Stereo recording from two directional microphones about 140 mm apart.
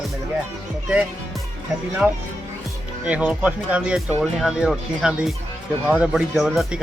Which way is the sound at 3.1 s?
10° right (ahead or behind).